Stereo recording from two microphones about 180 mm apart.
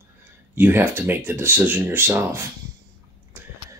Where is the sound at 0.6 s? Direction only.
10° right (ahead or behind).